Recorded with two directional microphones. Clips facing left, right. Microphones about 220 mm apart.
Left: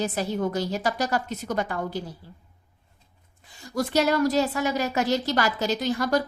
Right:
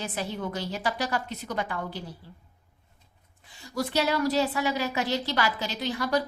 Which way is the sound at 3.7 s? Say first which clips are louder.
Left 4 dB; 45° left (ahead or behind).